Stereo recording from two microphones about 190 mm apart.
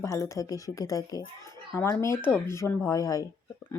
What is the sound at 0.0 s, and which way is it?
Speech, 15° left (ahead or behind).